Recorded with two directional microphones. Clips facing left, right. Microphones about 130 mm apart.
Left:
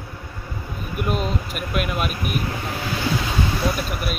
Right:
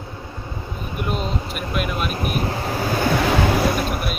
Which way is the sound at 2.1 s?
40° right (ahead or behind).